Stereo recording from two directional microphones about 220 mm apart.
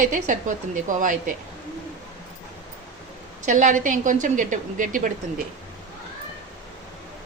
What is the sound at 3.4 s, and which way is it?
A woman's voice, 35° right (ahead or behind).